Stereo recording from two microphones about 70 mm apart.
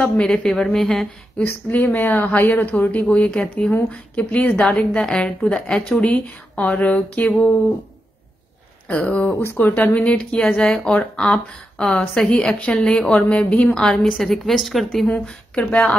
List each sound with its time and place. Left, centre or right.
0.0 s a woman's voice: centre
1.4 s a woman's voice: left
8.8 s a woman's voice: centre
9.4 s speech: left
9.9 s a woman's voice: centre
11.9 s a woman's voice: left; by 15.0 s centre
15.2 s a woman's voice: centre